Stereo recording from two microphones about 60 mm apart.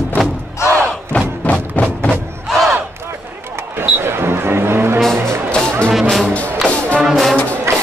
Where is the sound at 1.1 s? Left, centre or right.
Left.